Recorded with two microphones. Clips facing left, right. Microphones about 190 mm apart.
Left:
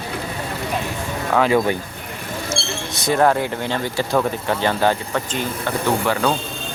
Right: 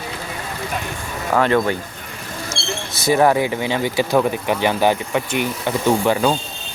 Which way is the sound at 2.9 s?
5° right (ahead or behind).